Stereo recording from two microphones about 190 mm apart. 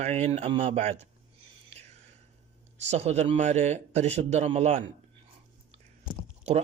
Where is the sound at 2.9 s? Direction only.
35° right (ahead or behind).